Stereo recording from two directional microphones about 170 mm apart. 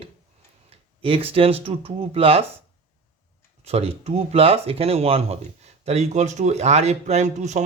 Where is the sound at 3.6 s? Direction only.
35° right (ahead or behind).